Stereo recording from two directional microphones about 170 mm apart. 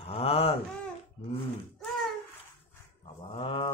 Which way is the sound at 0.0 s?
35° left (ahead or behind).